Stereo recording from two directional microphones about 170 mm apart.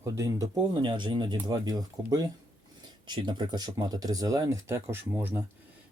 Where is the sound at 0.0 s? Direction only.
20° right (ahead or behind).